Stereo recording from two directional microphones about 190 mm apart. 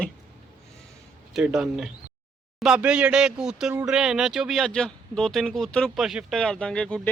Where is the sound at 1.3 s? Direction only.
5° right (ahead or behind).